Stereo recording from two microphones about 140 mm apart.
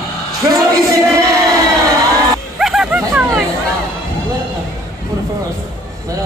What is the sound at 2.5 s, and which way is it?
Music, 5° right (ahead or behind).